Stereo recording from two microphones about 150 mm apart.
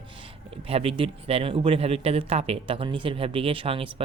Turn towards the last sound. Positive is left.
turn(degrees=-35)  # may be behind; listen again after turning